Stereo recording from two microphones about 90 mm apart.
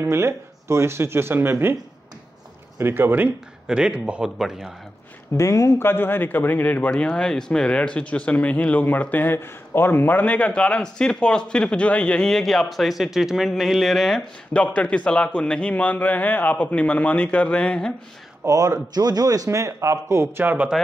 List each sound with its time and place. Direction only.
0.0 s speech: 30° right (ahead or behind)
2.8 s speech: 25° right (ahead or behind)
3.6 s a man's voice: 10° right (ahead or behind)
5.4 s speech: 35° left (ahead or behind); by 14.2 s centre (ahead or behind)
14.5 s speech: 15° left (ahead or behind)
18.4 s speech: 35° right (ahead or behind)
20.4 s a man's voice: 15° right (ahead or behind)